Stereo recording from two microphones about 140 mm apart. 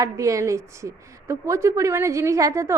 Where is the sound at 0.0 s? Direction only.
25° right (ahead or behind).